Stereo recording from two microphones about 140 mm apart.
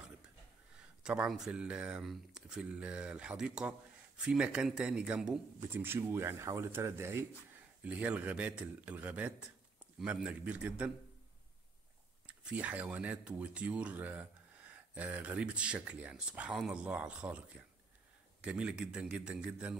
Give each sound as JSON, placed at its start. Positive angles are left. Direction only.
{"t": 0.7, "sound": "speech", "side_deg": -5}
{"t": 12.3, "sound": "speech", "side_deg": -10}